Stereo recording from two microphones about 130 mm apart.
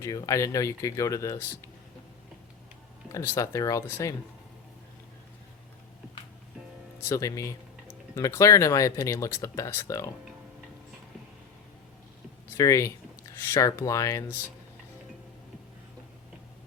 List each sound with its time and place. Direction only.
0.0 s speech: 25° left (ahead or behind)
3.1 s speech: 25° left (ahead or behind)
7.0 s speech: 25° left (ahead or behind)
12.5 s speech: 25° left (ahead or behind)